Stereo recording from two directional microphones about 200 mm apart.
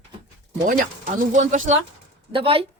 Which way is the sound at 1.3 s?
40° right (ahead or behind).